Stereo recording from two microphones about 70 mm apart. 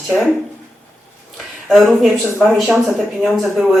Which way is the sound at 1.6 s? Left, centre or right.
Centre.